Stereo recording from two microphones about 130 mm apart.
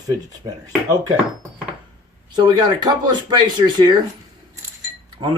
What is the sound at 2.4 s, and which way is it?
Speech, 35° right (ahead or behind).